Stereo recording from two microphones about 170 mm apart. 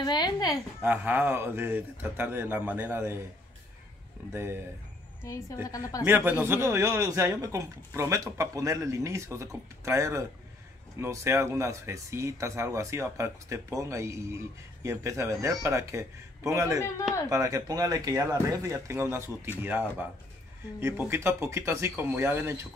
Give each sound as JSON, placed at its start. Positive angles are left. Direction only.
{"t": 0.0, "sound": "a woman's voice", "side_deg": 25}
{"t": 0.8, "sound": "a man's voice", "side_deg": -10}
{"t": 4.3, "sound": "a man's voice", "side_deg": -15}
{"t": 5.2, "sound": "a woman's voice", "side_deg": 20}
{"t": 6.0, "sound": "a man's voice", "side_deg": -15}